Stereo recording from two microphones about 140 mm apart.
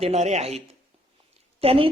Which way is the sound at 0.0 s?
50° right (ahead or behind).